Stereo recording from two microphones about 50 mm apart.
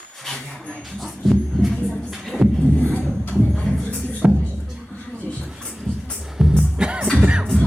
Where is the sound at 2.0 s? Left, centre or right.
Centre.